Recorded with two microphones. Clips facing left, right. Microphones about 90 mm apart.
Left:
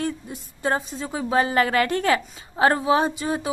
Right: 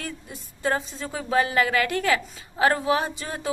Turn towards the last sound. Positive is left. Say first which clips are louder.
# left 5 dB
turn(degrees=20)  # may be behind; listen again after turning